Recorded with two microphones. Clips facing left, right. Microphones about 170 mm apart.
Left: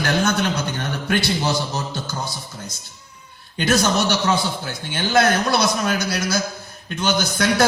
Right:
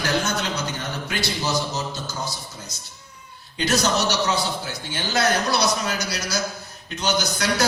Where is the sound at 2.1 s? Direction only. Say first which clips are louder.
Left 2 dB; 55° left (ahead or behind).